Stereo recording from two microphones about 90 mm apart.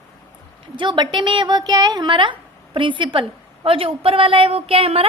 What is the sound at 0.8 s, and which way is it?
A woman's voice, 55° right (ahead or behind).